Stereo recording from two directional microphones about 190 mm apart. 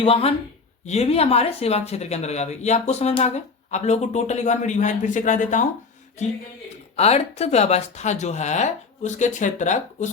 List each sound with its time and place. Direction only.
0.0 s speech: 30° left (ahead or behind)
6.9 s speech: 35° left (ahead or behind)